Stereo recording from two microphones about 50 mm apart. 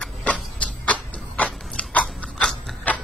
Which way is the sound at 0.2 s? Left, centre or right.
Left.